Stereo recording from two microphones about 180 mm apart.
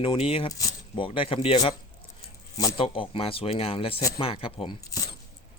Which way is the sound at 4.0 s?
20° left (ahead or behind).